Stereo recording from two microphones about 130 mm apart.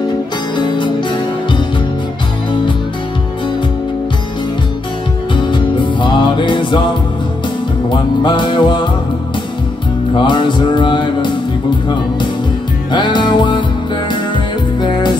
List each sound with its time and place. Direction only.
5.3 s music: 40° left (ahead or behind)
7.9 s music: 35° left (ahead or behind)
10.2 s music: 35° left (ahead or behind)
12.9 s music: 35° left (ahead or behind)